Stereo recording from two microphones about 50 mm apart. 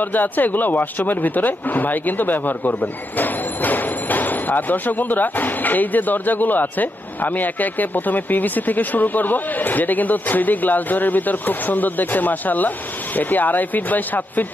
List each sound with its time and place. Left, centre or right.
0.0 s speech: left